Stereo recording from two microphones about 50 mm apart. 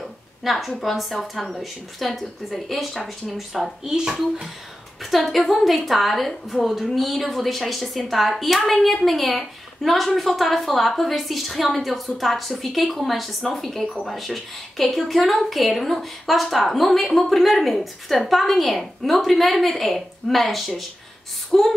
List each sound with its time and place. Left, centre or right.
0.0 s a woman's voice: centre
3.9 s speech: centre
5.1 s a woman's voice: centre